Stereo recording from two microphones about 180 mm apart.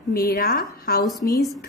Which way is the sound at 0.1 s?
60° left (ahead or behind).